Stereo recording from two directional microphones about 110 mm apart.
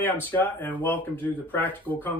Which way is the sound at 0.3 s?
15° left (ahead or behind).